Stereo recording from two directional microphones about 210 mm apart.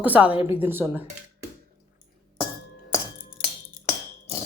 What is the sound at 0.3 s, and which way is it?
Speech, 25° left (ahead or behind).